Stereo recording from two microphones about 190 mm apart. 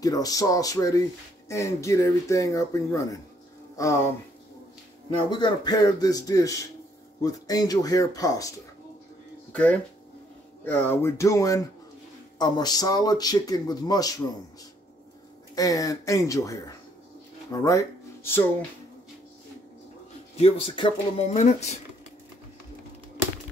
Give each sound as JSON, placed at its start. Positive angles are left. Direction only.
{"t": 0.0, "sound": "speech", "side_deg": 20}
{"t": 5.3, "sound": "speech", "side_deg": 20}
{"t": 9.5, "sound": "speech", "side_deg": 5}
{"t": 15.5, "sound": "speech", "side_deg": 20}
{"t": 17.5, "sound": "music", "side_deg": 20}
{"t": 20.3, "sound": "speech", "side_deg": 30}